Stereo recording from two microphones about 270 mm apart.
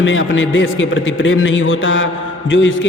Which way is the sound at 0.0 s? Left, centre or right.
Left.